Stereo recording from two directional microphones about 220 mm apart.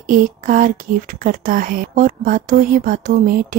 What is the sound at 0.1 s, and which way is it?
A woman's voice, 40° right (ahead or behind).